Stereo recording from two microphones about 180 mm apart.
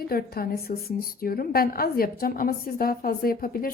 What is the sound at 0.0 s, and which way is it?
A woman's voice, 55° left (ahead or behind).